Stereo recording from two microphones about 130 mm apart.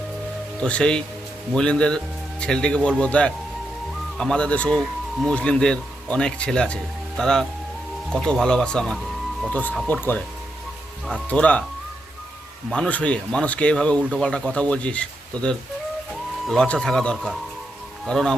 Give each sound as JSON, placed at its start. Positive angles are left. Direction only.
{"t": 0.6, "sound": "speech", "side_deg": 5}
{"t": 11.3, "sound": "speech", "side_deg": 10}
{"t": 12.7, "sound": "speech", "side_deg": 10}
{"t": 16.5, "sound": "speech", "side_deg": 5}